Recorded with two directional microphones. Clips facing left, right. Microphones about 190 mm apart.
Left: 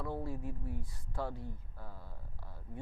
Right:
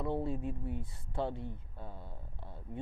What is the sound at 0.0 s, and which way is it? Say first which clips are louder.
Speech: right 5 dB; 25° right (ahead or behind).